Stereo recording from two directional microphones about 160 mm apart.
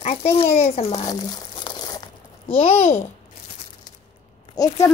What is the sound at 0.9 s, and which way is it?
Crumpling, 25° left (ahead or behind).